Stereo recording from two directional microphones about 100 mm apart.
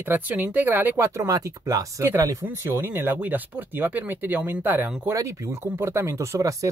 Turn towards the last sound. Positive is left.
turn(degrees=-35)  # may be behind; listen again after turning